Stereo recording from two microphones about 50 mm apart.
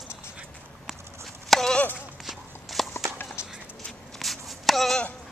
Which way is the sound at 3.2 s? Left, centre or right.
Left.